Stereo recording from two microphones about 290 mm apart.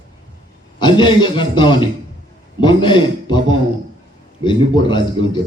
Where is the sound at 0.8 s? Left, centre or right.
Centre.